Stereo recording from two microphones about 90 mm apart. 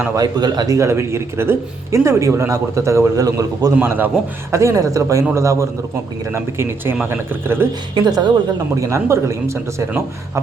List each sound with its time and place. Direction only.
0.2 s speech: 50° right (ahead or behind)
3.8 s speech: 20° right (ahead or behind)
4.5 s speech: 35° right (ahead or behind)
7.9 s speech: 55° right (ahead or behind)
8.7 s speech: 35° right (ahead or behind)